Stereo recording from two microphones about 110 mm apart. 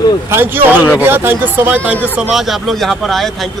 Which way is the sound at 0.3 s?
20° right (ahead or behind).